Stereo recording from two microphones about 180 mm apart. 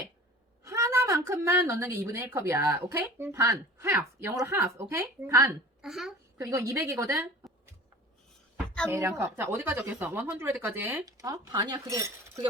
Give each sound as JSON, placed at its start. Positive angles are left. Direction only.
{"t": 0.6, "sound": "a woman's voice", "side_deg": -15}
{"t": 5.8, "sound": "a woman's voice", "side_deg": 0}
{"t": 6.4, "sound": "a woman's voice", "side_deg": -15}
{"t": 8.5, "sound": "a sound", "side_deg": 5}
{"t": 8.9, "sound": "a woman's voice", "side_deg": -15}